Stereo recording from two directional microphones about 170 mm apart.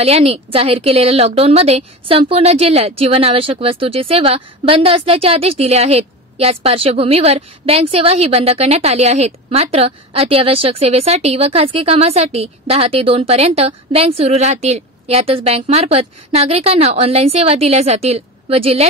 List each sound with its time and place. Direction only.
0.0 s a woman's voice: 35° right (ahead or behind)